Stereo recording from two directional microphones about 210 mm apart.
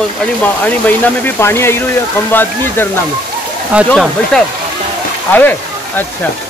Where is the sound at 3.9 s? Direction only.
5° left (ahead or behind).